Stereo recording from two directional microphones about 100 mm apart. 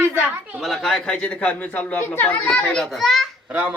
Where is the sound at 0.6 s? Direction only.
Centre (ahead or behind); by 2.4 s 15° left (ahead or behind).